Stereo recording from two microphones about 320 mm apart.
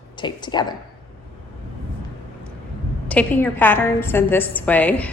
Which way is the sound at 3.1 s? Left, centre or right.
Centre.